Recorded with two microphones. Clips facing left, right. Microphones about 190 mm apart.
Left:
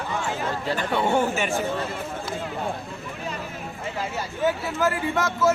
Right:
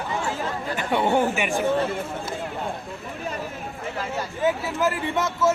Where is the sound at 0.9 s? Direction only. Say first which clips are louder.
Right 2 dB; 15° right (ahead or behind).